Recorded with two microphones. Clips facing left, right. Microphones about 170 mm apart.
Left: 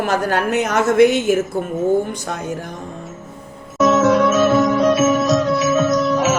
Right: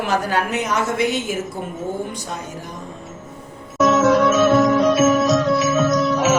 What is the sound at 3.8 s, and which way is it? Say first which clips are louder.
Music: left 1 dB; centre (ahead or behind).